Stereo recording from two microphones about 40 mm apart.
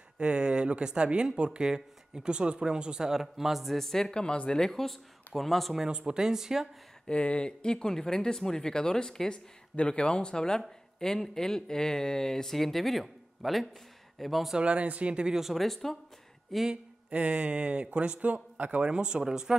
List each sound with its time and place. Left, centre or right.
0.2 s speech: right
3.1 s speech: centre
5.9 s speech: right
7.1 s speech: left; by 14.5 s centre
14.6 s speech: right
15.2 s speech: centre
15.5 s speech: centre
17.1 s speech: right
18.9 s speech: right